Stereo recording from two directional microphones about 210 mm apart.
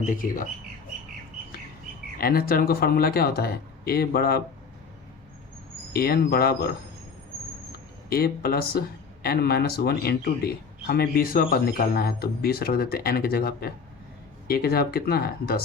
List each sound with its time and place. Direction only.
0.0 s speech: 40° left (ahead or behind)
2.1 s a man's voice: 45° left (ahead or behind)
5.9 s a man's voice: 45° left (ahead or behind)
8.1 s a man's voice: 45° left (ahead or behind)